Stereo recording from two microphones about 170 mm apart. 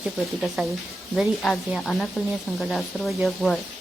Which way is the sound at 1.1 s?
Centre (ahead or behind).